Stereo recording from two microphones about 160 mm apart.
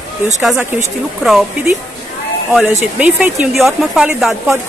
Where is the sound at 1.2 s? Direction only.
5° right (ahead or behind).